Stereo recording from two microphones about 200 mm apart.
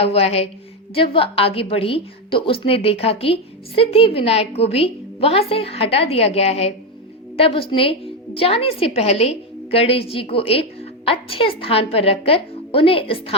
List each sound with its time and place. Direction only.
0.0 s a woman's voice: 30° left (ahead or behind)